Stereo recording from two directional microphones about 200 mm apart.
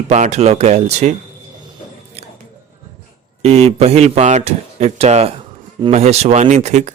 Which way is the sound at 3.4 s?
30° right (ahead or behind).